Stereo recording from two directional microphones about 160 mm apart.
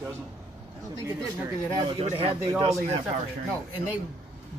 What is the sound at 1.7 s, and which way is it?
Speech, 40° right (ahead or behind).